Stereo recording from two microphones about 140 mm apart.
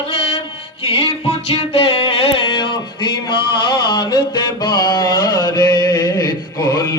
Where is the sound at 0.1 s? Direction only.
45° left (ahead or behind).